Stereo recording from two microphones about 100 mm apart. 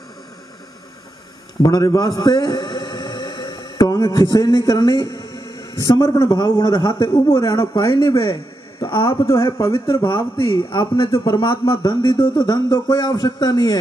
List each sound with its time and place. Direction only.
1.6 s a sound: 40° left (ahead or behind)
3.7 s a man's voice: 40° left (ahead or behind)
8.2 s a man's voice: 60° left (ahead or behind)
9.2 s speech: 30° left (ahead or behind)
10.0 s a man's voice: 60° left (ahead or behind)
12.2 s speech: 45° left (ahead or behind)